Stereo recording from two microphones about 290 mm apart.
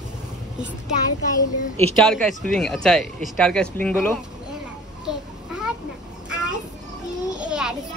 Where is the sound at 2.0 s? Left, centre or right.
Centre.